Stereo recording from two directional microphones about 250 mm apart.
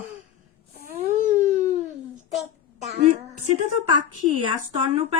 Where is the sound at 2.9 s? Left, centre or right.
Right.